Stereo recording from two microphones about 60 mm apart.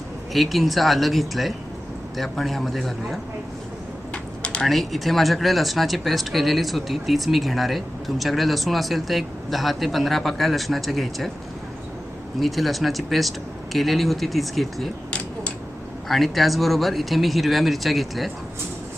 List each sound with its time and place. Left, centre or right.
0.3 s speech: centre
4.1 s a sound: centre
4.6 s speech: centre
12.4 s speech: centre
16.0 s speech: centre